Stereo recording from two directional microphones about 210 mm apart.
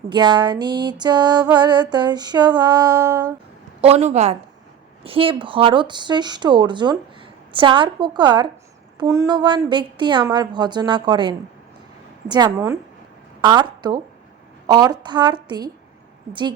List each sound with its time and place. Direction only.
0.1 s a woman's voice: 20° right (ahead or behind)
3.8 s a woman's voice: 30° right (ahead or behind)